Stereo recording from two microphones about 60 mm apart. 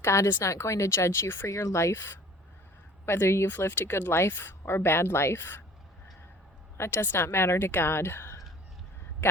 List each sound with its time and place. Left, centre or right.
0.0 s speech: left
6.7 s speech: left